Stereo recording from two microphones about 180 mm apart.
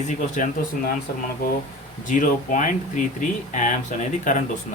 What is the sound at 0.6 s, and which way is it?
Speech, 55° left (ahead or behind).